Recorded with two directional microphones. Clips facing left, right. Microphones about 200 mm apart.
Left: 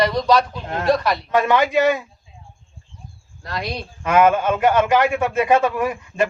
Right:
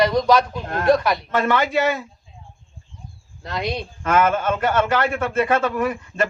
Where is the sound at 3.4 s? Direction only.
20° right (ahead or behind).